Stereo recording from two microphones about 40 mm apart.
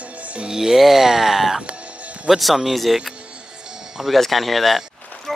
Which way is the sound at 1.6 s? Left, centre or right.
Right.